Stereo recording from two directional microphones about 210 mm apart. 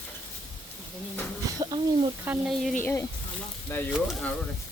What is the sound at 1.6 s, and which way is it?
Speech, 20° right (ahead or behind).